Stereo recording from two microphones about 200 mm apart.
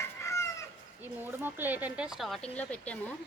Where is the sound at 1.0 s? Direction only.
10° right (ahead or behind).